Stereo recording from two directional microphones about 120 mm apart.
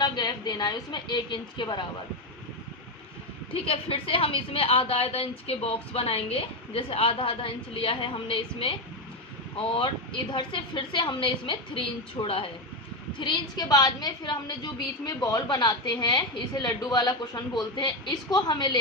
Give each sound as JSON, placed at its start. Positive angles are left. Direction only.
{"t": 0.0, "sound": "a woman's voice", "side_deg": 35}
{"t": 3.5, "sound": "a woman's voice", "side_deg": 50}
{"t": 9.7, "sound": "a woman's voice", "side_deg": 45}
{"t": 13.1, "sound": "a woman's voice", "side_deg": 35}